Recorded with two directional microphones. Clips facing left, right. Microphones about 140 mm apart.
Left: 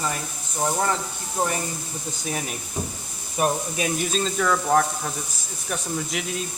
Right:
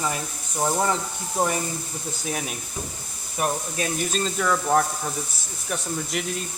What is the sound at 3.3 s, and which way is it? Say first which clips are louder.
Speech: left 2 dB; 15° left (ahead or behind).